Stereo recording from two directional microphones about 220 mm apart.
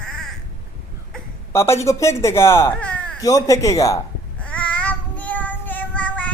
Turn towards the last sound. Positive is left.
turn(degrees=5)  # may be behind; listen again after turning